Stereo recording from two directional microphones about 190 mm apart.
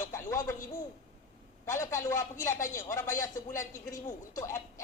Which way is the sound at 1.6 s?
15° left (ahead or behind).